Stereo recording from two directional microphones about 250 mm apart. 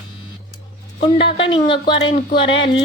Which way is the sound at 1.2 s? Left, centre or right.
Centre.